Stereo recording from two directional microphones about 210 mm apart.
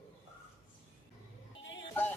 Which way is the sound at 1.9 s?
10° left (ahead or behind).